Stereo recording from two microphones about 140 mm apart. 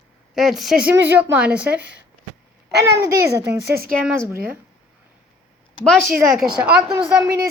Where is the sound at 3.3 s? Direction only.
20° right (ahead or behind).